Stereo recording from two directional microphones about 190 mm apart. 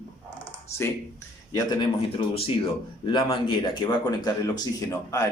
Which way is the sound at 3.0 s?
25° left (ahead or behind).